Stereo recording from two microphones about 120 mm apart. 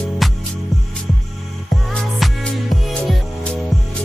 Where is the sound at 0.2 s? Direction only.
Centre (ahead or behind).